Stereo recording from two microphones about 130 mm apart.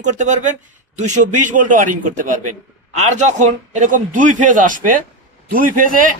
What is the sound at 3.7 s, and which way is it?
A man's voice, 80° right.